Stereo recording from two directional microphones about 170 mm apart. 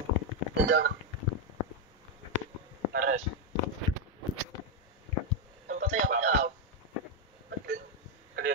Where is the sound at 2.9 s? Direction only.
50° right (ahead or behind).